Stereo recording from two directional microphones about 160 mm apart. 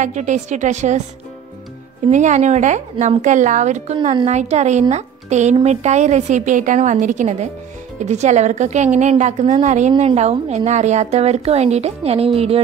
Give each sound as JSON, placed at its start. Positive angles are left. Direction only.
{"t": 0.0, "sound": "a woman's voice", "side_deg": -50}
{"t": 2.0, "sound": "a woman's voice", "side_deg": -50}
{"t": 3.9, "sound": "a woman's voice", "side_deg": -35}